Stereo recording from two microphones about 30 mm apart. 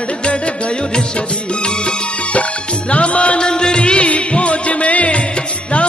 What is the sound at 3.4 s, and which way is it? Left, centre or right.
Music, left.